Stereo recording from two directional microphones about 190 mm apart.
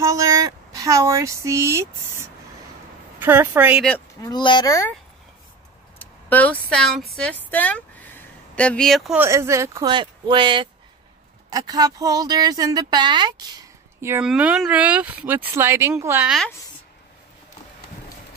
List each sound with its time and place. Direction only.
0.0 s speech: 15° right (ahead or behind)
4.2 s a child's voice: 25° left (ahead or behind)
5.9 s speech: 10° left (ahead or behind)
9.2 s a woman's voice: 15° right (ahead or behind)
14.2 s speech: 5° right (ahead or behind)